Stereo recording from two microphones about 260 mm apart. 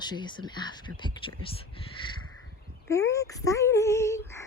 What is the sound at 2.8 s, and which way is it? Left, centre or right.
Speech, centre.